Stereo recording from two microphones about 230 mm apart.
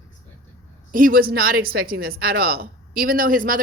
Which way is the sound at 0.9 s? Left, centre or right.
Right.